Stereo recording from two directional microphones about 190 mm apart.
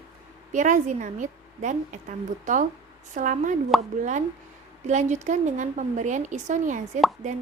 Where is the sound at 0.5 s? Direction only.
40° right (ahead or behind).